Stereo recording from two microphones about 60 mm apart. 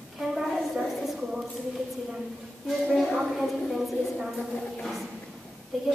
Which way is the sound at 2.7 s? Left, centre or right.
Centre.